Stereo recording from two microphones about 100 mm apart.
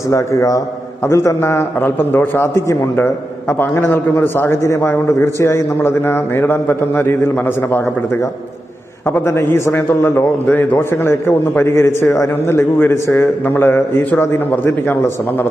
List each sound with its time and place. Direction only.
0.1 s a man's voice: 30° left (ahead or behind)